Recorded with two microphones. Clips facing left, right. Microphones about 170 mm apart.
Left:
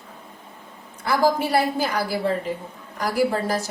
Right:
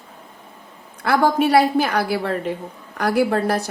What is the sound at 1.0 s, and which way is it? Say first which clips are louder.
A woman's voice: right 3 dB; 65° right (ahead or behind).